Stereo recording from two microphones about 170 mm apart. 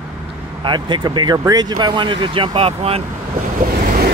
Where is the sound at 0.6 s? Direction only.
25° right (ahead or behind).